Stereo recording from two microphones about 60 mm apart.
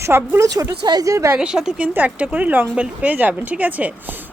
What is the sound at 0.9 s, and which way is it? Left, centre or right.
Speech, right.